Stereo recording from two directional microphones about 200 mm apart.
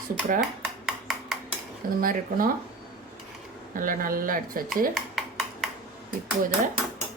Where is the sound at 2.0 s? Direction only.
45° right (ahead or behind).